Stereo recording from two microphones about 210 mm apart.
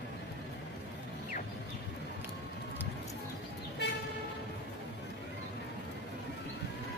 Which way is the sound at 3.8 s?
55° left (ahead or behind).